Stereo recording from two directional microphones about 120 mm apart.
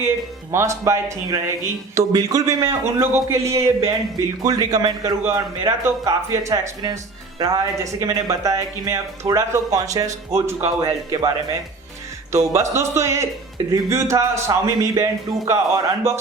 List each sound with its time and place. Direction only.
0.5 s a man's voice: 25° right (ahead or behind)
10.8 s speech: 35° right (ahead or behind)
12.5 s a man's voice: 25° right (ahead or behind)